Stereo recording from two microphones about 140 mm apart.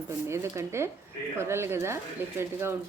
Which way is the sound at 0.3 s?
20° right (ahead or behind).